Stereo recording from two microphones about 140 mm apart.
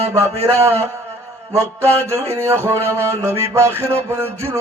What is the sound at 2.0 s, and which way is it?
Mantra, 20° right (ahead or behind).